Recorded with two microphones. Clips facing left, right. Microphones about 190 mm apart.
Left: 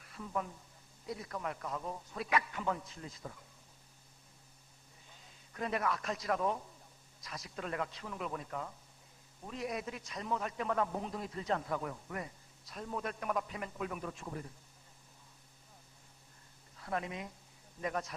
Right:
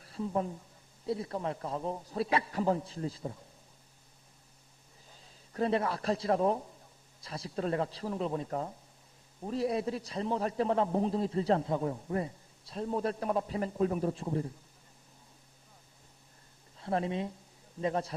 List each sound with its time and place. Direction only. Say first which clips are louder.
0.0 s a man's voice: right 7 dB; 30° right (ahead or behind)
5.0 s a man's voice: right 3 dB; 30° right (ahead or behind)
16.7 s a man's voice: right 7 dB; 30° right (ahead or behind)